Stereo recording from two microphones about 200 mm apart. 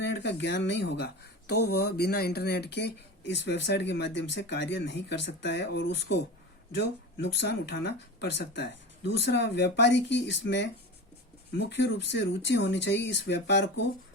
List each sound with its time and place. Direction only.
0.0 s speech: 60° left (ahead or behind)